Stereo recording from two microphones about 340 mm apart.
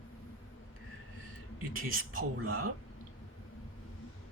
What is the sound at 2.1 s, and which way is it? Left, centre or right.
Speech, right.